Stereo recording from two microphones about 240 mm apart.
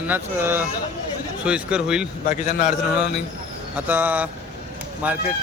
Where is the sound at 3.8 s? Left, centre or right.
Centre.